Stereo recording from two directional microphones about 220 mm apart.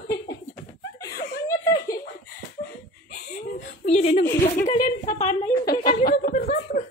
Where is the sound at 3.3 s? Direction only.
35° left (ahead or behind).